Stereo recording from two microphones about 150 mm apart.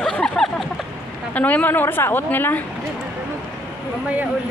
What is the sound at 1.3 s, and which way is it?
A woman's voice, 10° left (ahead or behind).